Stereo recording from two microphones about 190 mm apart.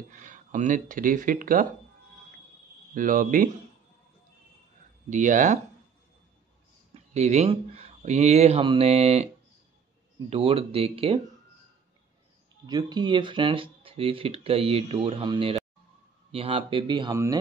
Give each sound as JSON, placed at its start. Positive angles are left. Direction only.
{"t": 0.1, "sound": "speech", "side_deg": -40}
{"t": 2.9, "sound": "speech", "side_deg": -45}
{"t": 5.1, "sound": "speech", "side_deg": -40}
{"t": 6.9, "sound": "speech", "side_deg": -35}
{"t": 10.3, "sound": "speech", "side_deg": -30}
{"t": 12.6, "sound": "speech", "side_deg": -20}